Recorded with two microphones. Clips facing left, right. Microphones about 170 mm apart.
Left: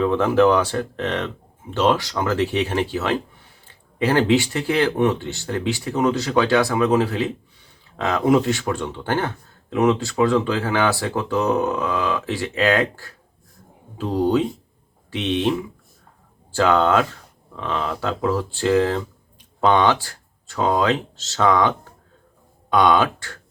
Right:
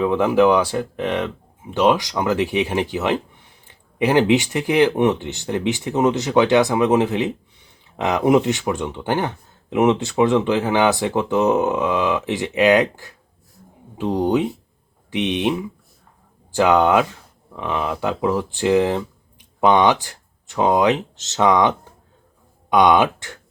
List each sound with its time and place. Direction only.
0.0 s speech: 15° right (ahead or behind)